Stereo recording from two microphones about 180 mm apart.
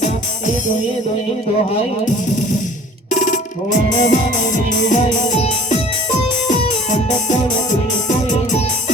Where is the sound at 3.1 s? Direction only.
45° left (ahead or behind).